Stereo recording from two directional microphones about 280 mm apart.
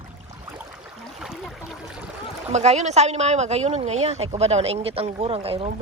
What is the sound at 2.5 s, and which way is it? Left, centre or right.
A woman's voice, right.